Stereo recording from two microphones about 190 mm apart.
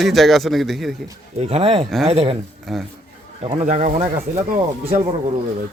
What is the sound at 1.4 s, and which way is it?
Speech, 35° right (ahead or behind).